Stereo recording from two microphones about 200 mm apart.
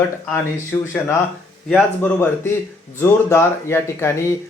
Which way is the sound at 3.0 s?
10° left (ahead or behind).